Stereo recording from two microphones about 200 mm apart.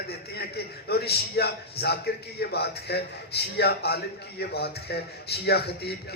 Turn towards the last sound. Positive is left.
turn(degrees=55)  # may be behind; listen again after turning